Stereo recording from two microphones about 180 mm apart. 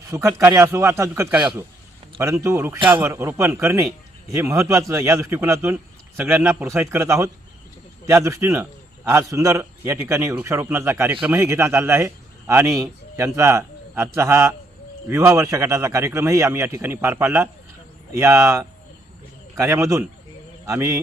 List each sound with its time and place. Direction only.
0.1 s a man's voice: 15° right (ahead or behind)